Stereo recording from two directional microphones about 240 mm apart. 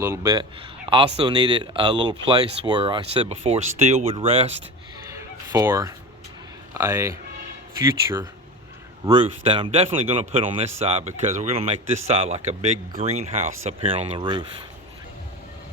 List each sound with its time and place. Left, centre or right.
0.0 s speech: centre
5.0 s a sound: centre
6.7 s speech: centre
9.0 s speech: right